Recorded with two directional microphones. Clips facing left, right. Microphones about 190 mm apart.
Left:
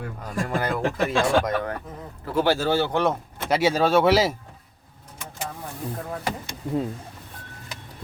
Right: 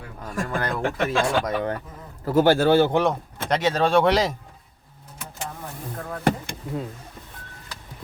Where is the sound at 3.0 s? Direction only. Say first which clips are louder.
Right 1 dB; 5° left (ahead or behind).